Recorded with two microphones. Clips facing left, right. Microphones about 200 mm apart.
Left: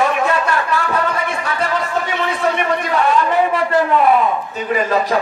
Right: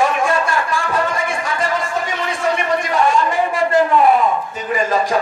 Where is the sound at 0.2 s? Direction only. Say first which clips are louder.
Even; 45° right (ahead or behind).